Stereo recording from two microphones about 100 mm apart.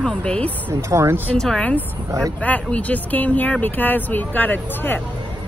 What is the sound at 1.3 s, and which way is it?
Speech, 5° left (ahead or behind).